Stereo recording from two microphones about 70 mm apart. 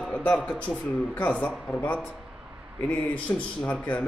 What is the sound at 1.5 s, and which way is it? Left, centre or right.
Speech, centre.